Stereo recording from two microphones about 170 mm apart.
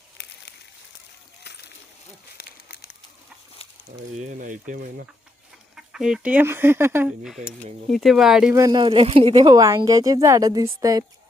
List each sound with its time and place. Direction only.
4.2 s speech: 50° right (ahead or behind)
5.7 s speech: 5° right (ahead or behind)
7.9 s speech: centre (ahead or behind)
8.5 s speech: 20° right (ahead or behind)